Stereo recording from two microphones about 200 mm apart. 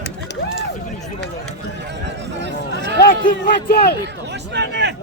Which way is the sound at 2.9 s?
50° left (ahead or behind).